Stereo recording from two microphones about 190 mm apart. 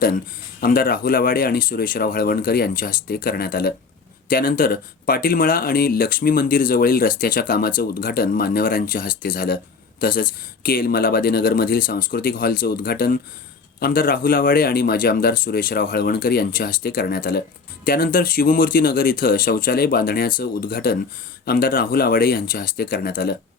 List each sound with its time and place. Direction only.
0.6 s speech: 50° left (ahead or behind)